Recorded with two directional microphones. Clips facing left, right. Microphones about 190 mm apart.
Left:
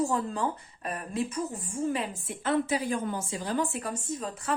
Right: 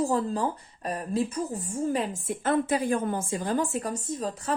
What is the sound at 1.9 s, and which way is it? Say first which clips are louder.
A woman's voice: right 4 dB; 45° right (ahead or behind).